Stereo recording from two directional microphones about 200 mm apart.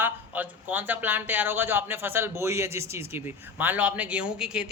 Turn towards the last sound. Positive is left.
turn(degrees=-5)  # may be behind; listen again after turning